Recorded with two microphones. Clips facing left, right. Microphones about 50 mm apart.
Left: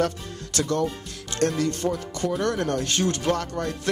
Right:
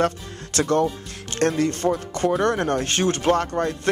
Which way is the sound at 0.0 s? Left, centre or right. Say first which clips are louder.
Right 3 dB; right.